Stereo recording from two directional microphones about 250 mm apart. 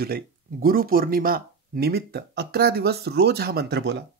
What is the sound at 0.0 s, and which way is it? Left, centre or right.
Speech, right.